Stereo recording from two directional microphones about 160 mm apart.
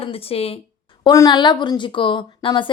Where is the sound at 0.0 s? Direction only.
35° left (ahead or behind).